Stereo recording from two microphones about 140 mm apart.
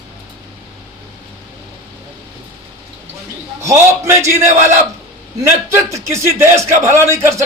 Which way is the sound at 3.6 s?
20° right (ahead or behind).